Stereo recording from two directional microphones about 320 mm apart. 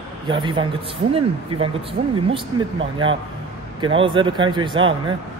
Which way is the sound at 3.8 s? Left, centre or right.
Centre.